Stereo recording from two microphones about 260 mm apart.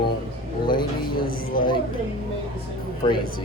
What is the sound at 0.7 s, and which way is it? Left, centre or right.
Speech, centre.